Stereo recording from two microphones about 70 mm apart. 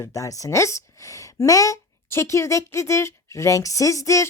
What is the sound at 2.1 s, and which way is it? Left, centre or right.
Speech, left.